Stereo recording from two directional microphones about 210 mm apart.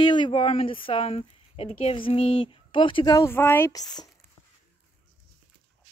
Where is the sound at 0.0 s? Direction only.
20° left (ahead or behind).